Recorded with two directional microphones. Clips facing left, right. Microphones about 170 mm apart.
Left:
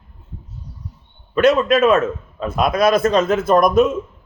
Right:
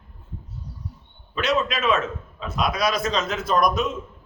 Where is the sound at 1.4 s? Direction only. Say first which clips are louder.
Left 10 dB; 50° left (ahead or behind).